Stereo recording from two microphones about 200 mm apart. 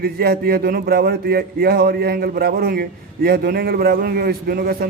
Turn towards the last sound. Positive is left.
turn(degrees=-50)  # may be behind; listen again after turning